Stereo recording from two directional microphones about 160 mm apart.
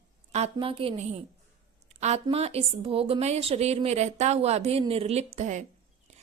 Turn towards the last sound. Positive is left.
turn(degrees=-45)  # may be behind; listen again after turning